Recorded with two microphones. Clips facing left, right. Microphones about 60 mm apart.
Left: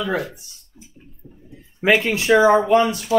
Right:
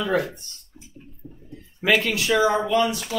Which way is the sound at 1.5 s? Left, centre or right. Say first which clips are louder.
Left 3 dB; left.